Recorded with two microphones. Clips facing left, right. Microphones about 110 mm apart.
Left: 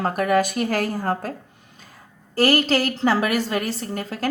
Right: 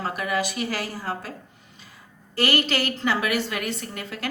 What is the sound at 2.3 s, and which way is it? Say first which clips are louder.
A woman's voice: left 5 dB; 40° left (ahead or behind).